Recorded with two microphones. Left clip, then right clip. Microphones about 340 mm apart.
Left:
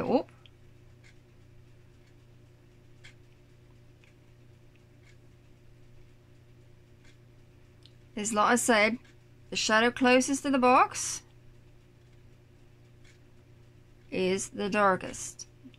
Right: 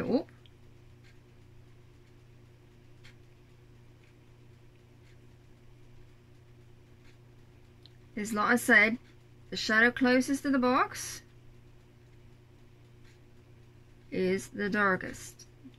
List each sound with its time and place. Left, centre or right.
0.1 s speech: centre
8.1 s a woman's voice: centre
14.1 s speech: centre